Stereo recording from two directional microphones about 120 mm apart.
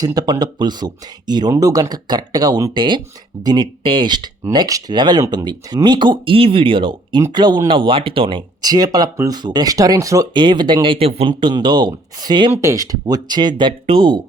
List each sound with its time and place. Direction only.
0.0 s speech: 30° right (ahead or behind)
2.7 s speech: 40° right (ahead or behind)
10.3 s speech: 40° right (ahead or behind)